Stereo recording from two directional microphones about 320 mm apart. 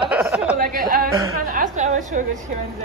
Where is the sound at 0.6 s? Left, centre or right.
Right.